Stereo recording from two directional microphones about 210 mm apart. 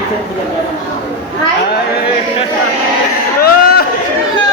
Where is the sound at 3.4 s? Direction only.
45° left (ahead or behind).